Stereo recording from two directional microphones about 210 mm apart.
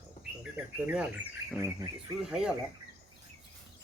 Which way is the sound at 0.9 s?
5° right (ahead or behind).